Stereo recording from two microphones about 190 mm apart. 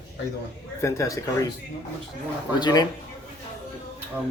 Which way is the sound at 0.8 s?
15° left (ahead or behind).